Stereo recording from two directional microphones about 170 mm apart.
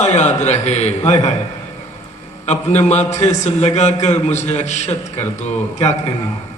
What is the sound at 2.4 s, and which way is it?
A man's voice, 40° left (ahead or behind).